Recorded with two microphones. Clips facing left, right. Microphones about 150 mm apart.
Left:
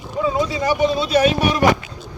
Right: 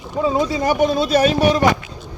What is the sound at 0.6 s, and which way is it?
Speech, 50° right (ahead or behind).